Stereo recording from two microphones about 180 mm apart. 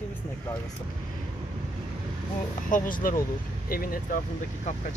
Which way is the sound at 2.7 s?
50° left (ahead or behind).